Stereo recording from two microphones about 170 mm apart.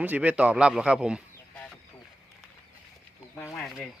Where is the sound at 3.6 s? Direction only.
Centre (ahead or behind).